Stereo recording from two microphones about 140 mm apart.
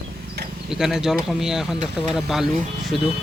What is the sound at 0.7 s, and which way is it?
Speech, 5° right (ahead or behind).